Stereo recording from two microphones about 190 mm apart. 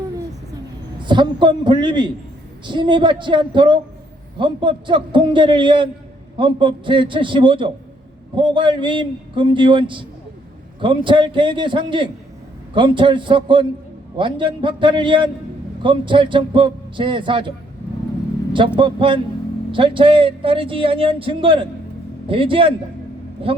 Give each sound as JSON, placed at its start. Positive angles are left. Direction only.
{"t": 0.9, "sound": "speech", "side_deg": -25}
{"t": 18.8, "sound": "speech", "side_deg": -25}